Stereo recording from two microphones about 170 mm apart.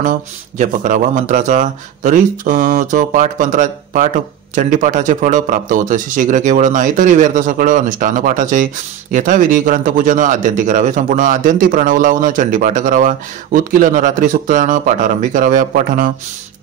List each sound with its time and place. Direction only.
0.6 s a man's voice: 45° right (ahead or behind)